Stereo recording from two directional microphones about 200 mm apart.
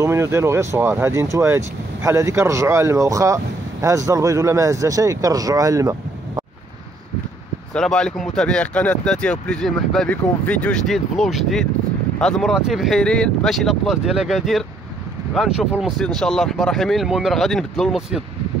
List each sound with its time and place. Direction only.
0.0 s speech: 15° right (ahead or behind)
7.7 s speech: 5° left (ahead or behind)